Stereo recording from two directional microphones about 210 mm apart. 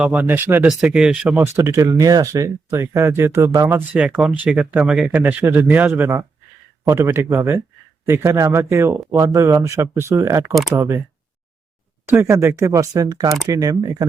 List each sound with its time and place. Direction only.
0.0 s speech: 5° right (ahead or behind)
12.0 s speech: 10° right (ahead or behind)